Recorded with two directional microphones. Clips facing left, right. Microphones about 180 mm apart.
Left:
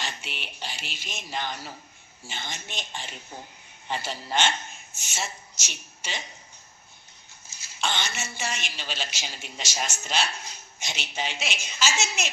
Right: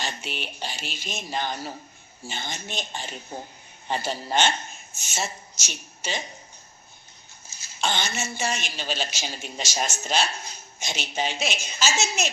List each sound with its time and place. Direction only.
0.0 s a woman's voice: 40° right (ahead or behind)
7.8 s a woman's voice: 40° right (ahead or behind)